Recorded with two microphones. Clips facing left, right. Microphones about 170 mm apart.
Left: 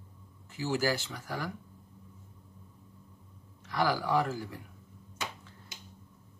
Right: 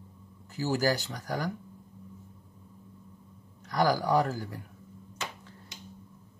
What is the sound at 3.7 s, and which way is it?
Speech, 40° right (ahead or behind).